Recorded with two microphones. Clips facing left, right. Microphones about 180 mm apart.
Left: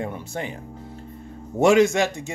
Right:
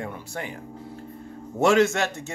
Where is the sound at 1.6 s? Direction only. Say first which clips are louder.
Left 3 dB; 15° left (ahead or behind).